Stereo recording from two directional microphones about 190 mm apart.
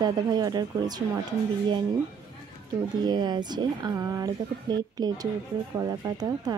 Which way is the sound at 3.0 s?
25° right (ahead or behind).